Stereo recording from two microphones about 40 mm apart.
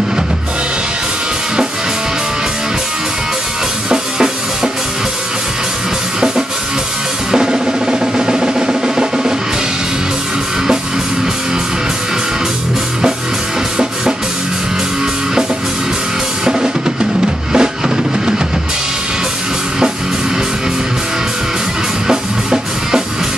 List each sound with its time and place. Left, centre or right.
7.2 s drum: right
16.4 s drum: right
22.0 s music: centre